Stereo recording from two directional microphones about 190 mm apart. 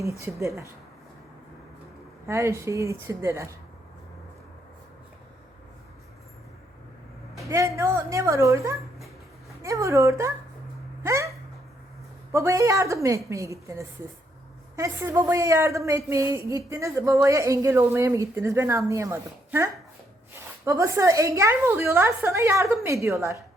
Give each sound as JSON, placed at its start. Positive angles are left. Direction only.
{"t": 0.0, "sound": "a woman's voice", "side_deg": -15}
{"t": 2.2, "sound": "a woman's voice", "side_deg": -15}
{"t": 7.3, "sound": "a sound", "side_deg": -15}
{"t": 7.8, "sound": "a woman's voice", "side_deg": -15}
{"t": 11.0, "sound": "hiccup", "side_deg": -15}
{"t": 12.3, "sound": "a woman's voice", "side_deg": -15}